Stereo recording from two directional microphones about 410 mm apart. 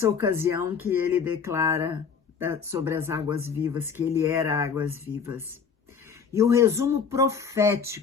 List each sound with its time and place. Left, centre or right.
0.0 s speech: centre
6.3 s speech: centre